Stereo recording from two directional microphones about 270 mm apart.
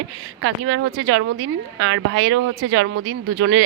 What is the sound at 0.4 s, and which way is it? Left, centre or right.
A woman's voice, right.